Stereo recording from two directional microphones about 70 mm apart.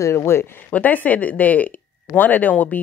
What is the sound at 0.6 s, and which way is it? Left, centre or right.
Speech, left.